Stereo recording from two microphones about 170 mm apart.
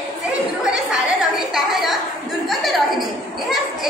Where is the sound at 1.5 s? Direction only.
Centre (ahead or behind).